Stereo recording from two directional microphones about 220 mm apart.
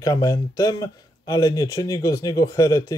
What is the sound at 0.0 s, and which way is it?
Speech, 15° left (ahead or behind).